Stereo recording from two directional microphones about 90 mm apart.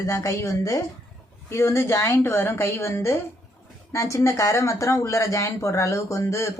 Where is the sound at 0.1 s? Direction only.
35° left (ahead or behind).